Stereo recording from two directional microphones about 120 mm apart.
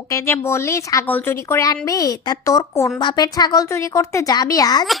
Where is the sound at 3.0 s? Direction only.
40° left (ahead or behind).